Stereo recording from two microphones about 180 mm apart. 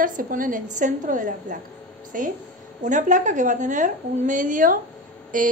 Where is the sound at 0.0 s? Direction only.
50° right (ahead or behind).